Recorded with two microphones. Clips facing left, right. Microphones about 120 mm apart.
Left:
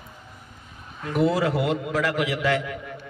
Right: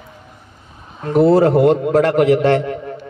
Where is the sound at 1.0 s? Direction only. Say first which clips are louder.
Right 10 dB; 40° right (ahead or behind).